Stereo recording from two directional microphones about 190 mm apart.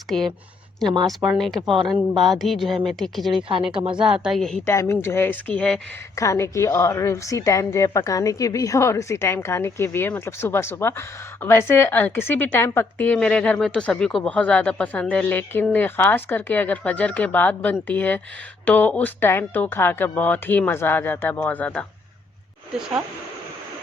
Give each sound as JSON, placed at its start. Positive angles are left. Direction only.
{"t": 0.1, "sound": "speech", "side_deg": 0}
{"t": 2.1, "sound": "speech", "side_deg": -20}
{"t": 2.4, "sound": "speech", "side_deg": 0}
{"t": 3.5, "sound": "speech", "side_deg": -30}
{"t": 4.0, "sound": "speech", "side_deg": -5}
{"t": 4.6, "sound": "a woman's voice", "side_deg": 15}